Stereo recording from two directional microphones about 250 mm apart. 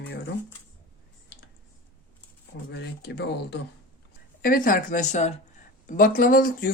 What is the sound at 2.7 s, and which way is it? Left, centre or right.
Speech, left.